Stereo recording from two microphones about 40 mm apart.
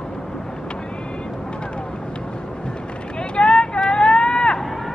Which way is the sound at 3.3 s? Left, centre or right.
Left.